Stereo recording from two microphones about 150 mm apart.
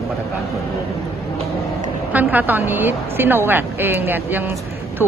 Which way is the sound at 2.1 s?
10° right (ahead or behind).